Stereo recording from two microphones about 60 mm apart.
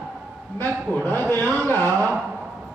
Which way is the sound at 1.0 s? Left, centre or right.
Left.